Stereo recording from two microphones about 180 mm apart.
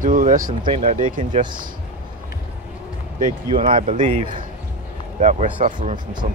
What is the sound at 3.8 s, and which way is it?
Speech, 45° right (ahead or behind).